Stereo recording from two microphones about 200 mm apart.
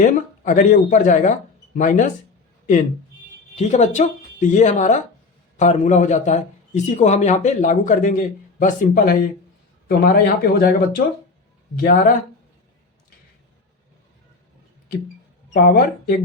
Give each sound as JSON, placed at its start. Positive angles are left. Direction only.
{"t": 0.0, "sound": "a man's voice", "side_deg": 40}
{"t": 3.5, "sound": "a man's voice", "side_deg": 35}
{"t": 15.5, "sound": "speech", "side_deg": 45}